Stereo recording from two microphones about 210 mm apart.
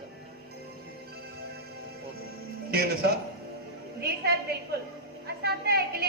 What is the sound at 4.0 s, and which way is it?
A woman's voice, 50° right (ahead or behind).